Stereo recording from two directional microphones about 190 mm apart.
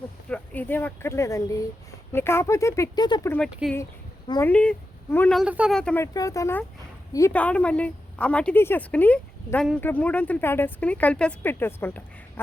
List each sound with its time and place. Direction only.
0.3 s a woman's voice: 10° left (ahead or behind)
3.5 s speech: centre (ahead or behind)
4.3 s a woman's voice: 15° left (ahead or behind)
5.4 s a woman's voice: 5° right (ahead or behind); by 12.0 s 10° left (ahead or behind)